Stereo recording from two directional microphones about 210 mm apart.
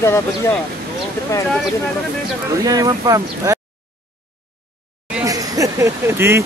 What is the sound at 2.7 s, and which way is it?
Speech, 15° right (ahead or behind).